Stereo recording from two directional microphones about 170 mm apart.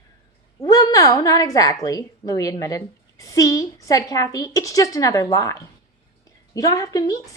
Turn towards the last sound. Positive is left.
turn(degrees=20)  # may be behind; listen again after turning